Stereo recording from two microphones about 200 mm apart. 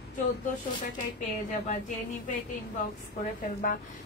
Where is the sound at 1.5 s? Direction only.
40° left (ahead or behind).